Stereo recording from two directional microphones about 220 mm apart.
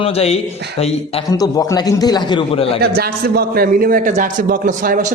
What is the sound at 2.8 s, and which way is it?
A man's voice, 45° right (ahead or behind).